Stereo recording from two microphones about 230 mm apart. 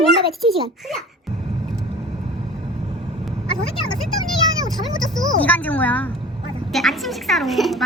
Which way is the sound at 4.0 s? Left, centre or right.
Centre.